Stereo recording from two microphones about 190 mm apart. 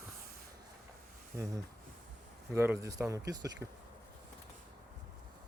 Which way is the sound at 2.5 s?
15° right (ahead or behind).